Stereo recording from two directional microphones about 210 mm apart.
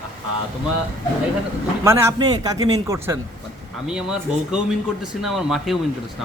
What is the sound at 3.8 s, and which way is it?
Speech, 5° right (ahead or behind).